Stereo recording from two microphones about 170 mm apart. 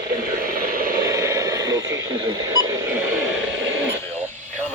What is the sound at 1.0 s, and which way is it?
Radio, 20° right (ahead or behind).